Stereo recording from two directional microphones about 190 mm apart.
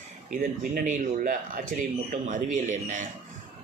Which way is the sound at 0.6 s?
50° right (ahead or behind).